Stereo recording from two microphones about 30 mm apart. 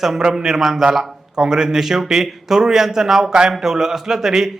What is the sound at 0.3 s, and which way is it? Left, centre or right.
A man's voice, centre.